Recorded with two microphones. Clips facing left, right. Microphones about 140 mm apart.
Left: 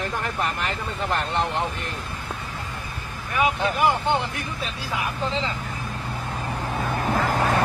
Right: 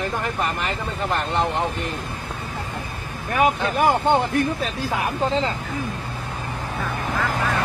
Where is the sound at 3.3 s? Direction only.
45° right (ahead or behind).